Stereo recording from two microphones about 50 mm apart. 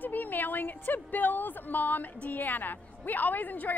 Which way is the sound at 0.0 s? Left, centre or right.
Left.